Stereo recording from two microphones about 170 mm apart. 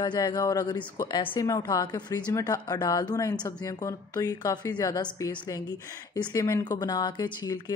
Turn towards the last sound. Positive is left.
turn(degrees=20)  # may be behind; listen again after turning